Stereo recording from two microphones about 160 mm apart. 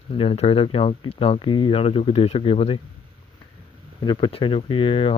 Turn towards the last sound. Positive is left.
turn(degrees=35)  # may be behind; listen again after turning